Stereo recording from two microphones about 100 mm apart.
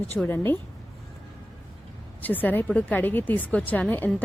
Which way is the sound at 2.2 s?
15° left (ahead or behind).